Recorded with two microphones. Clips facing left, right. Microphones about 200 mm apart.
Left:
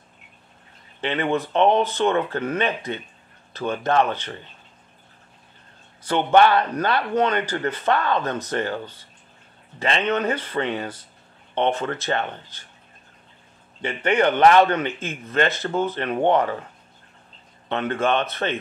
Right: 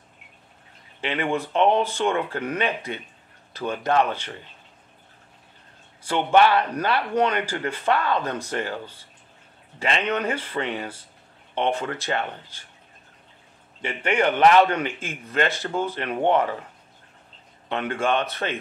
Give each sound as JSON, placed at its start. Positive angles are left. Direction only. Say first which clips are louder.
{"t": 1.0, "sound": "speech", "louder": "left 2 dB", "side_deg": -10}
{"t": 6.0, "sound": "speech", "louder": "left 2 dB", "side_deg": -5}
{"t": 13.8, "sound": "speech", "louder": "left 3 dB", "side_deg": -10}
{"t": 17.6, "sound": "speech", "louder": "left 2 dB", "side_deg": -10}